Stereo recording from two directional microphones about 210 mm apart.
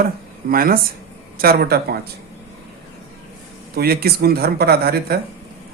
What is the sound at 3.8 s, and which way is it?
Speech, 45° right (ahead or behind).